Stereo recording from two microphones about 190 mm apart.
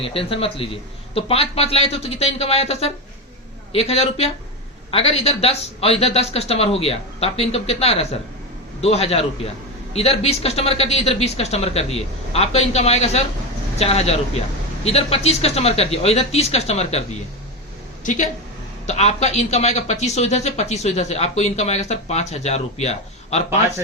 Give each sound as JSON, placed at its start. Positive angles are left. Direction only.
{"t": 0.0, "sound": "speech", "side_deg": 30}
{"t": 18.0, "sound": "speech", "side_deg": 40}